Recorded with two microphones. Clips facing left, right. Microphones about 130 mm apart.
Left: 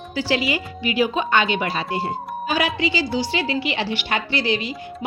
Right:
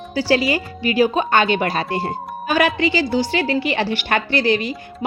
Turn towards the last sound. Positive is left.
turn(degrees=-50)  # may be behind; listen again after turning